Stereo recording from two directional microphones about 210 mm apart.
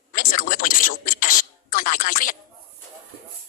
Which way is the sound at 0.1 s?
40° left (ahead or behind).